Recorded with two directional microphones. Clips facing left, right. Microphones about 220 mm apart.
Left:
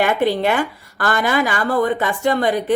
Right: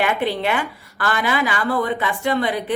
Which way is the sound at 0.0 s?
40° left (ahead or behind).